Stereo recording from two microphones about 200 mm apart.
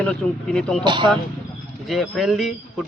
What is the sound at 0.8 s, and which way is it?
Speech, 25° right (ahead or behind).